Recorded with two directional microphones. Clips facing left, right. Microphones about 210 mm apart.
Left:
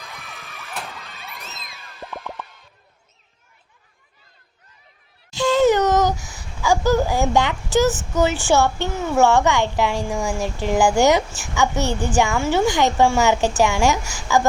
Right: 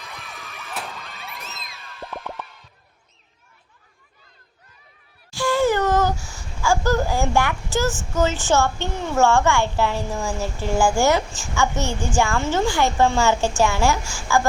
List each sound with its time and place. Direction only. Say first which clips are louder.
0.4 s music: even; centre (ahead or behind)
5.3 s a woman's voice: left 4 dB; 20° left (ahead or behind)